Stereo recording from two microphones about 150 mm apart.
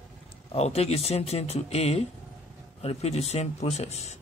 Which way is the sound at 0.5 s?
45° left (ahead or behind).